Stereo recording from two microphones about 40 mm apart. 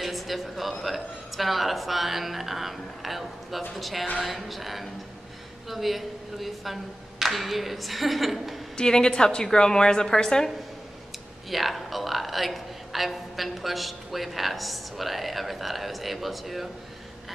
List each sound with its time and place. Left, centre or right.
0.0 s a sound: centre
0.8 s a man's voice: centre
8.7 s a woman's voice: centre
11.5 s a man's voice: centre